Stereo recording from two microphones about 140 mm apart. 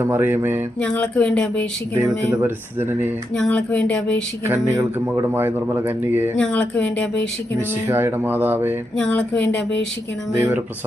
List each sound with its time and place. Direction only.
0.0 s speech: 15° right (ahead or behind)
0.8 s speech: 10° left (ahead or behind)
2.0 s speech: 15° right (ahead or behind)
3.3 s speech: 10° left (ahead or behind)
4.4 s speech: 20° right (ahead or behind)
5.3 s speech: 15° right (ahead or behind)
6.3 s speech: 10° left (ahead or behind)
7.9 s speech: 15° right (ahead or behind)
9.0 s speech: 10° left (ahead or behind)
10.3 s speech: 20° right (ahead or behind)